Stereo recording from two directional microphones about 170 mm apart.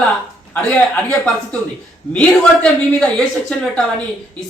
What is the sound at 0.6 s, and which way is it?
Speech, 5° left (ahead or behind).